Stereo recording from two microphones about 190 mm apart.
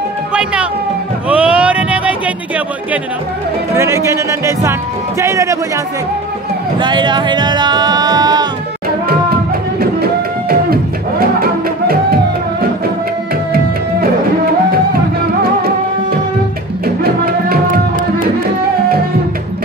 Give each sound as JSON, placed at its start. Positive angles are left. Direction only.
{"t": 0.3, "sound": "speech", "side_deg": -5}
{"t": 1.3, "sound": "a sound", "side_deg": -5}
{"t": 3.7, "sound": "speech", "side_deg": -15}
{"t": 6.8, "sound": "speech", "side_deg": -25}
{"t": 9.8, "sound": "music", "side_deg": -50}
{"t": 16.8, "sound": "music", "side_deg": -50}